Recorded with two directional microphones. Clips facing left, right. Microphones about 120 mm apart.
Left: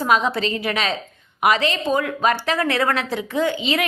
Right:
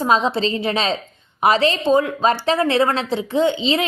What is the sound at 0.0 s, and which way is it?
A woman's voice, 25° right (ahead or behind).